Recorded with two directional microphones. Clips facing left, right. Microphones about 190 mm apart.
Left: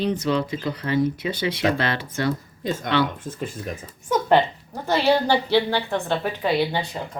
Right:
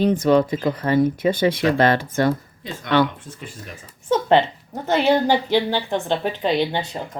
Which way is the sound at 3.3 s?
45° left (ahead or behind).